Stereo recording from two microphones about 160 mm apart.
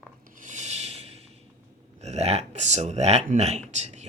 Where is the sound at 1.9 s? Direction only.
45° right (ahead or behind).